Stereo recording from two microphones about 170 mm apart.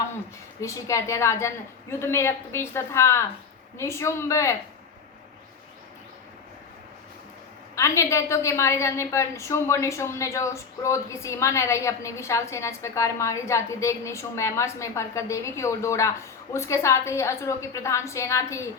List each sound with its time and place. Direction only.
0.6 s a woman's voice: 15° left (ahead or behind)
7.8 s a woman's voice: 15° left (ahead or behind)